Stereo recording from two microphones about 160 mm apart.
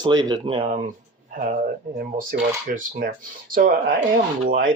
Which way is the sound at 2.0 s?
60° right (ahead or behind).